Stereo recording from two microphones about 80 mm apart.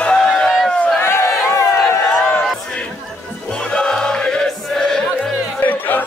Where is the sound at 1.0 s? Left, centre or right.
Left.